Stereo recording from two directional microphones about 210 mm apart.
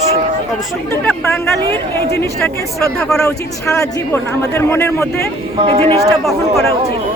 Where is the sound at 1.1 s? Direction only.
10° left (ahead or behind).